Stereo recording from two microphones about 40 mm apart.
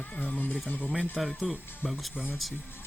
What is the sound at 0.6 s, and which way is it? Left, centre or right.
Speech, left.